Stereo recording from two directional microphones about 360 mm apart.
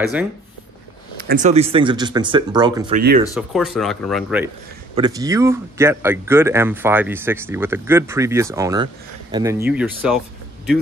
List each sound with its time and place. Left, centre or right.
1.2 s speech: right
3.0 s speech: right
3.3 s speech: centre